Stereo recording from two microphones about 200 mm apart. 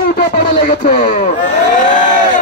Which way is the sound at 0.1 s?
50° left (ahead or behind).